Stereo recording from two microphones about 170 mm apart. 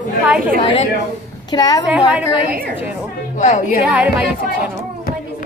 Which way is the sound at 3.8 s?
10° right (ahead or behind).